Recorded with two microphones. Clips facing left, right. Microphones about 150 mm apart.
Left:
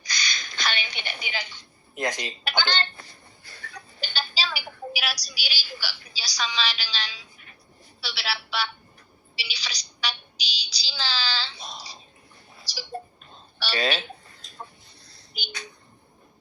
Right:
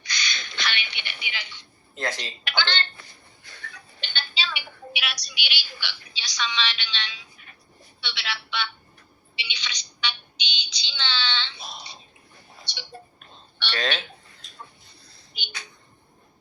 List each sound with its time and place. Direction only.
0.0 s a sound: 40° left (ahead or behind)
2.0 s speech: 15° left (ahead or behind)
2.4 s a woman's voice: 40° left (ahead or behind)
13.7 s speech: 10° left (ahead or behind)